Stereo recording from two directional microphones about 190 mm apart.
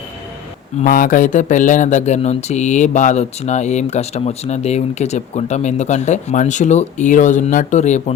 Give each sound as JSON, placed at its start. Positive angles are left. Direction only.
{"t": 0.8, "sound": "speech", "side_deg": 45}